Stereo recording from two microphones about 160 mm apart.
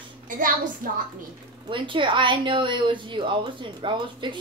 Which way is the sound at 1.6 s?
30° right (ahead or behind).